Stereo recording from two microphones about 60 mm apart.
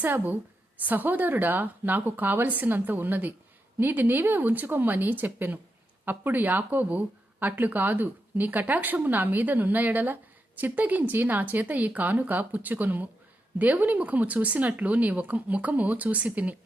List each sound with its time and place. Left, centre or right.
0.0 s speech: right